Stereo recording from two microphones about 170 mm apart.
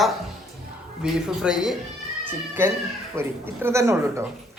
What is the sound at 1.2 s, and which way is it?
A man's voice, 5° right (ahead or behind).